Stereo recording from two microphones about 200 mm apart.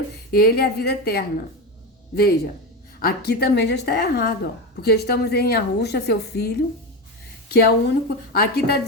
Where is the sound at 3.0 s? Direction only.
50° left (ahead or behind).